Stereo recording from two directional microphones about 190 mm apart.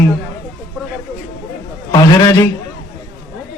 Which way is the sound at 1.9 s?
15° left (ahead or behind).